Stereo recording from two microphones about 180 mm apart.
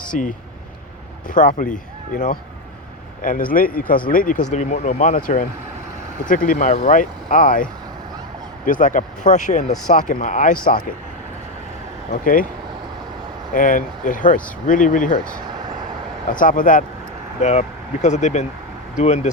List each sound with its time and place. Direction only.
0.1 s speech: 45° left (ahead or behind)
12.2 s speech: 50° left (ahead or behind)
13.5 s speech: 50° left (ahead or behind)
16.3 s speech: 50° left (ahead or behind)
17.4 s speech: 40° left (ahead or behind)